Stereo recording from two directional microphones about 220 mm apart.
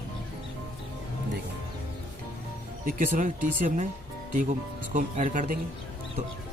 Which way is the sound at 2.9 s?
35° right (ahead or behind).